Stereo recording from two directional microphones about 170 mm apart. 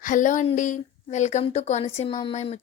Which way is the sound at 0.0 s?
50° left (ahead or behind).